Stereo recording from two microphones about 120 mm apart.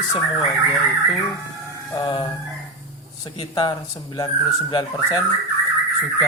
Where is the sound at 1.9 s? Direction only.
40° left (ahead or behind).